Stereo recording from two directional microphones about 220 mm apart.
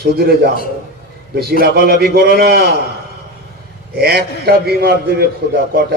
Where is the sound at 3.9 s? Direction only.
45° right (ahead or behind).